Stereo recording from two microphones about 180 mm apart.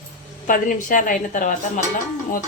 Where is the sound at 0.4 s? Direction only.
45° left (ahead or behind).